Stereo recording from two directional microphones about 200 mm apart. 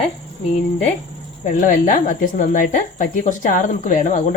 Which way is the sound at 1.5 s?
40° left (ahead or behind).